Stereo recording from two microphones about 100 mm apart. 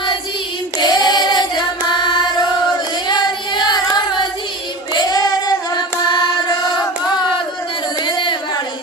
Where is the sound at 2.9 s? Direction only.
45° left (ahead or behind).